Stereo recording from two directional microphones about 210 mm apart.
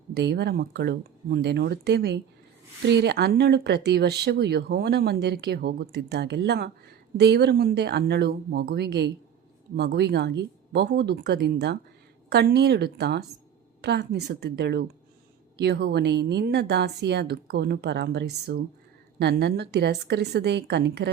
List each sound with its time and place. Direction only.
0.1 s speech: 50° right (ahead or behind)